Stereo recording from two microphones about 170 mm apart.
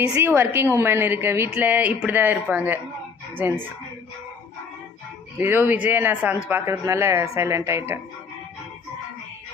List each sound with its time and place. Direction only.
0.1 s a woman's voice: 10° right (ahead or behind)
5.4 s a woman's voice: 10° right (ahead or behind)